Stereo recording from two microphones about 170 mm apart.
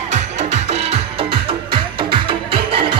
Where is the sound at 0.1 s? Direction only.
40° right (ahead or behind).